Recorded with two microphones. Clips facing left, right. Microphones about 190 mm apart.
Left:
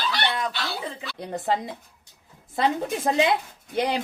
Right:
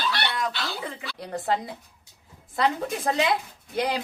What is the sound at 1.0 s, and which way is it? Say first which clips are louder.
Speech: left 1 dB; 20° left (ahead or behind).